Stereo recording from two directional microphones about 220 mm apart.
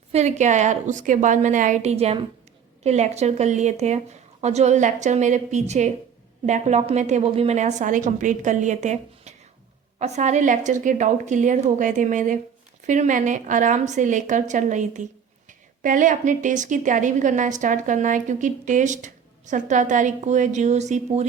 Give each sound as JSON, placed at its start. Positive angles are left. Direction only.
{"t": 0.1, "sound": "a woman's voice", "side_deg": -30}